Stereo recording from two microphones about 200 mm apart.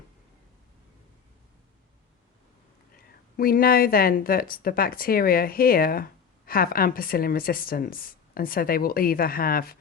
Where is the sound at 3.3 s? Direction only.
50° left (ahead or behind).